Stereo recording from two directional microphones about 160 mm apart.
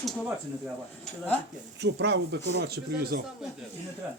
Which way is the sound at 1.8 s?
90° right.